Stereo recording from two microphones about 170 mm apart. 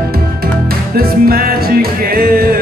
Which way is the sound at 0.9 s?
60° right (ahead or behind).